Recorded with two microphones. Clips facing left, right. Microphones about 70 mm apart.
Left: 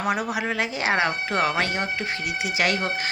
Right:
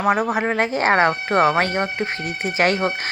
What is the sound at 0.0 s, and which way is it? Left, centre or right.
Speech, right.